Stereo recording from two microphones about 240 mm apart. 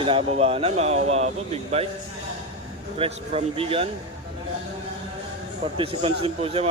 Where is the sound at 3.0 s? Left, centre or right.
Right.